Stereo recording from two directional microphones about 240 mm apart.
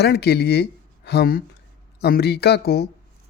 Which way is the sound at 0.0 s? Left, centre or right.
Left.